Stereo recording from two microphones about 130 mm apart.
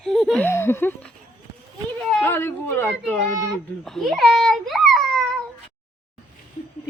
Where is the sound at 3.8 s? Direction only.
Centre (ahead or behind).